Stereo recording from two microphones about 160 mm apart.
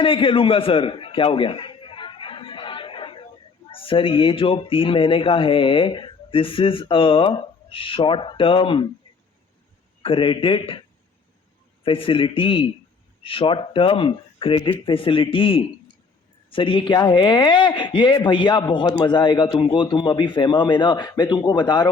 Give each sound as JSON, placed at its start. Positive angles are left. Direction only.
{"t": 0.0, "sound": "music", "side_deg": 35}
{"t": 3.7, "sound": "speech", "side_deg": 35}
{"t": 10.0, "sound": "speech", "side_deg": 35}